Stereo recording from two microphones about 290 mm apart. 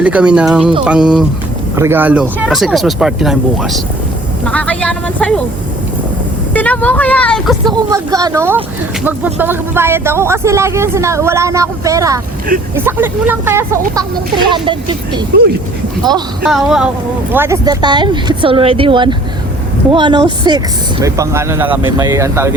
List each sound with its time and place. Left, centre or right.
0.0 s speech: centre
6.5 s speech: centre
7.6 s speech: centre
16.4 s speech: centre